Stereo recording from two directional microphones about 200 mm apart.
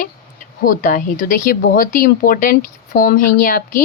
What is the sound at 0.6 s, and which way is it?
Speech, 45° left (ahead or behind).